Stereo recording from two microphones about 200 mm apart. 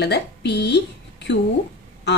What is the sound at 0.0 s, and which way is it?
A woman's voice, 55° left (ahead or behind).